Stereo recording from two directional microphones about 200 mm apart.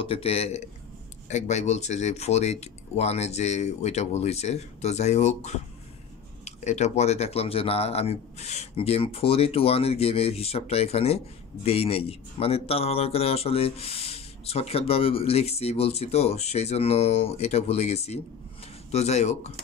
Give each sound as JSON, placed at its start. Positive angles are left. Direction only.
{"t": 0.0, "sound": "a man's voice", "side_deg": 30}